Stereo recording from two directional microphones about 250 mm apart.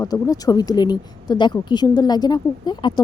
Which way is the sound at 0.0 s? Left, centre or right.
Centre.